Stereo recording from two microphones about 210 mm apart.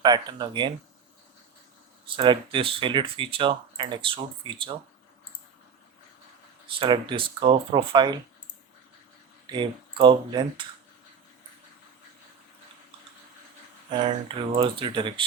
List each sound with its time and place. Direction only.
0.0 s speech: 20° right (ahead or behind)
2.0 s speech: 20° right (ahead or behind)
6.7 s speech: 25° right (ahead or behind)
9.5 s speech: 20° right (ahead or behind)
14.3 s speech: 25° right (ahead or behind)